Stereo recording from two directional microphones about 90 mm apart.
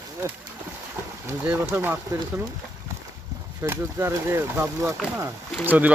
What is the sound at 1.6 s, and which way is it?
Speech, 30° right (ahead or behind).